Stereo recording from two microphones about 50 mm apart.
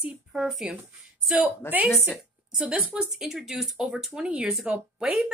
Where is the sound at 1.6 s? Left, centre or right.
Left.